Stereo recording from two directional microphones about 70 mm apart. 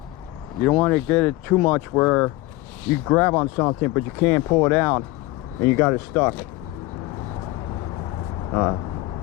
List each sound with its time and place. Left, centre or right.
0.6 s speech: centre